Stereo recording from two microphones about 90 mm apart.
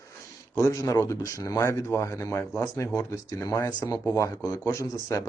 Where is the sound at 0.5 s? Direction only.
35° left (ahead or behind).